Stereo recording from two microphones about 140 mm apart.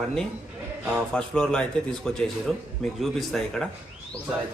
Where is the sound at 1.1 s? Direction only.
5° left (ahead or behind).